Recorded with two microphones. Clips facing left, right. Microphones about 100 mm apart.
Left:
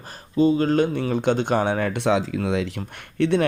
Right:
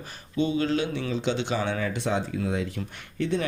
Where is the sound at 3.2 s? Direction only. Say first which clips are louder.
Left 7 dB; 65° left (ahead or behind).